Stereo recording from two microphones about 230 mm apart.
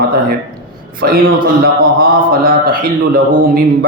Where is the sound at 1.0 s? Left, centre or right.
Right.